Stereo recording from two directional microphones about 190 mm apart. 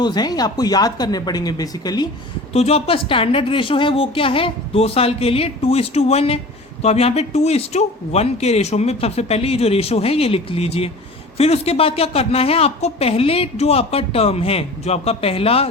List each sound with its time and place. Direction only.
0.0 s speech: 20° left (ahead or behind)
2.5 s a woman's voice: 30° left (ahead or behind)